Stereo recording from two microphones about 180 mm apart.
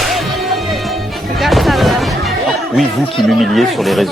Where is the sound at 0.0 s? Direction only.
Centre (ahead or behind).